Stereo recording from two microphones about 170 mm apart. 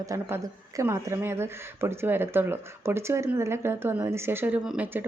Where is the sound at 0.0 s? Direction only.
20° right (ahead or behind).